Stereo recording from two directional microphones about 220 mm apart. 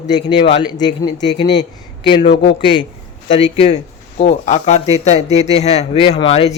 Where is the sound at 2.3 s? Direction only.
55° left (ahead or behind).